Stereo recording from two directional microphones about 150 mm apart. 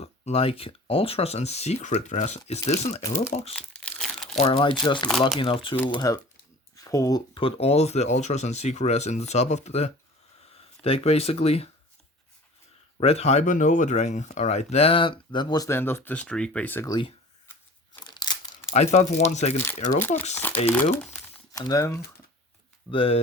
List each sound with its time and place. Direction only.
0.0 s speech: 40° left (ahead or behind)
3.5 s crumpling: 5° left (ahead or behind)
4.5 s speech: 30° left (ahead or behind)
6.7 s a sound: 20° left (ahead or behind)
7.3 s speech: 40° left (ahead or behind)
13.0 s speech: 45° left (ahead or behind); by 16.9 s 10° left (ahead or behind)
18.0 s crumpling: 30° left (ahead or behind)
18.7 s speech: 50° left (ahead or behind)
20.0 s speech: 15° left (ahead or behind)
21.5 s speech: 25° left (ahead or behind)
22.9 s speech: 40° left (ahead or behind)